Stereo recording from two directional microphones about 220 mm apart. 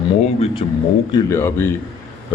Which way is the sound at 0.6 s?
30° left (ahead or behind).